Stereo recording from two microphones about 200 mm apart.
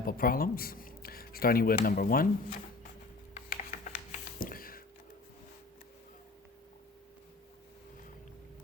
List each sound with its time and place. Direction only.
0.0 s speech: 45° left (ahead or behind)
3.3 s typing: 45° left (ahead or behind)
4.4 s a sound: 45° left (ahead or behind)